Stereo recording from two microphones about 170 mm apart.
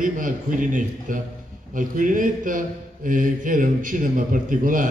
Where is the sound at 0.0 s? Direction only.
50° right (ahead or behind).